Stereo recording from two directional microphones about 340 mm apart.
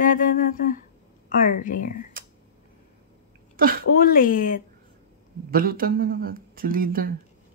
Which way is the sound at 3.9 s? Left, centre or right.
Left.